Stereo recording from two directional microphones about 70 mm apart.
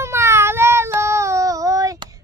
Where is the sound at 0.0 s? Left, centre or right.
Right.